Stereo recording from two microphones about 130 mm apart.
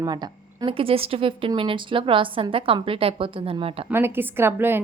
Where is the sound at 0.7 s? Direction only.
45° right (ahead or behind).